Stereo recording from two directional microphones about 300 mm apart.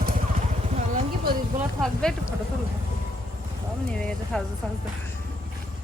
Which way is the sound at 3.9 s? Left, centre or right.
Centre.